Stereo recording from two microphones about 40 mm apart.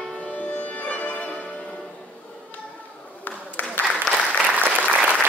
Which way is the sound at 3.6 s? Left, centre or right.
Left.